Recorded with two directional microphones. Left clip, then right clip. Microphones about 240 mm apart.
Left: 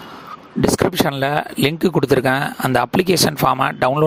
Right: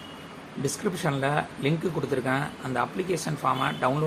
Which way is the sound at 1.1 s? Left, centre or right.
Left.